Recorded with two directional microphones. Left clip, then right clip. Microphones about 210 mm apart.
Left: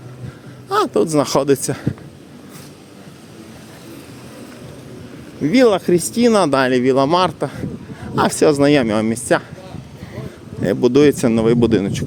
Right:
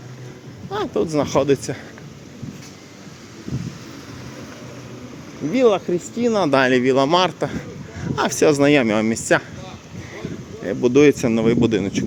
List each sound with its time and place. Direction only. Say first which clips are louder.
0.7 s speech: left 6 dB; 25° left (ahead or behind)
5.5 s speech: left 4 dB; 45° left (ahead or behind)
6.5 s speech: left 1 dB; 15° left (ahead or behind)
10.6 s speech: left 2 dB; 25° left (ahead or behind)